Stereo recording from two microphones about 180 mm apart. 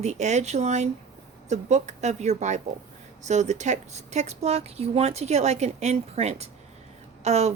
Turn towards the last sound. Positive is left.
turn(degrees=-35)  # may be behind; listen again after turning